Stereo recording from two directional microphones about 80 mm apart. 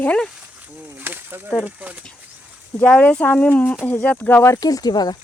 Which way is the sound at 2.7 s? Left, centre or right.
Centre.